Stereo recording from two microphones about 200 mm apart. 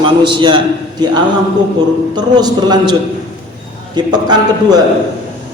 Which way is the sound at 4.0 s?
20° right (ahead or behind).